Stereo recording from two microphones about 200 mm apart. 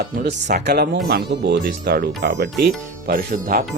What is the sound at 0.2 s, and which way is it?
Speech, 55° right (ahead or behind).